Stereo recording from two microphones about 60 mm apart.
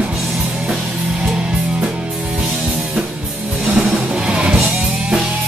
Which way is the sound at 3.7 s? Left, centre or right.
Centre.